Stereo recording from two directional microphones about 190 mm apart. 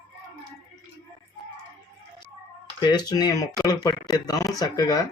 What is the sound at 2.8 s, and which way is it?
Speech, 20° left (ahead or behind).